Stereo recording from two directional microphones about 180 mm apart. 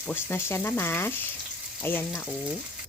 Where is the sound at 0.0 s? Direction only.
10° left (ahead or behind).